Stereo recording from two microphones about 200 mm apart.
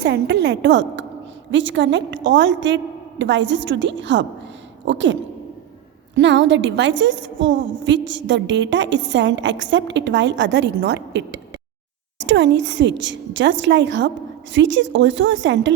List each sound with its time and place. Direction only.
0.0 s a woman's voice: 55° right (ahead or behind)
6.1 s a woman's voice: 65° right (ahead or behind)